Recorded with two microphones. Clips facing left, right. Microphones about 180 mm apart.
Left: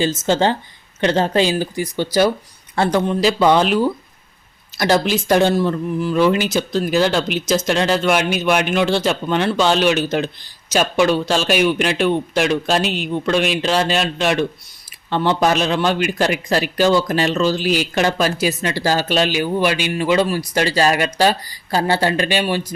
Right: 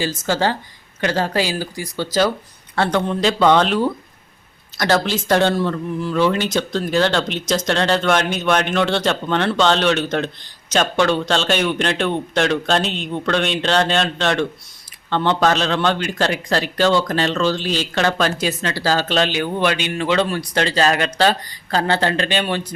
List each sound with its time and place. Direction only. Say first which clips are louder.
0.0 s speech: left 3 dB; 20° left (ahead or behind)
5.0 s speech: left 2 dB; 10° left (ahead or behind)